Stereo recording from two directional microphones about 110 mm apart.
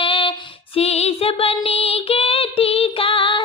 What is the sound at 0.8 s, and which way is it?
Female singing, 70° left (ahead or behind).